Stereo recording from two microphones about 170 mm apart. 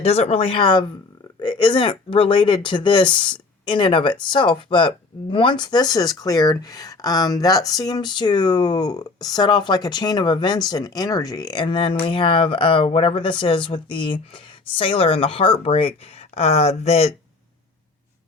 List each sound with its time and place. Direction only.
0.0 s speech: 35° left (ahead or behind)